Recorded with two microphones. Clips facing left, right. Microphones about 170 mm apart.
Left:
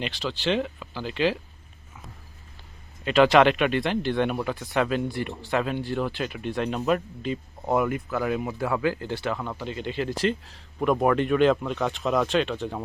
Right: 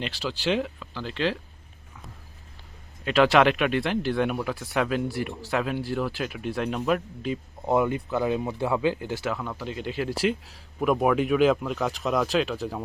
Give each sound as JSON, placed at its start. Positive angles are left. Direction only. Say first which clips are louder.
{"t": 0.0, "sound": "speech", "louder": "left 1 dB", "side_deg": -5}
{"t": 0.8, "sound": "speech", "louder": "left 3 dB", "side_deg": 10}
{"t": 3.0, "sound": "speech", "louder": "left 2 dB", "side_deg": 0}
{"t": 7.7, "sound": "speech", "louder": "right 1 dB", "side_deg": -20}
{"t": 9.0, "sound": "speech", "louder": "left 1 dB", "side_deg": -10}